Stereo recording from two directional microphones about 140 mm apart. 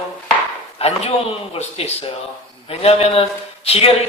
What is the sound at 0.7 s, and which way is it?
A woman's voice, 50° left (ahead or behind).